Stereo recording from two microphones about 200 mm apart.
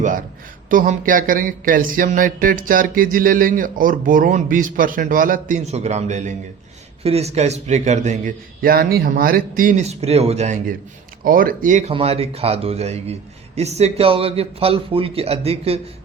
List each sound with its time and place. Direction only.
0.0 s a man's voice: 40° right (ahead or behind)
0.7 s a sound: 40° right (ahead or behind)
7.0 s a man's voice: 30° right (ahead or behind)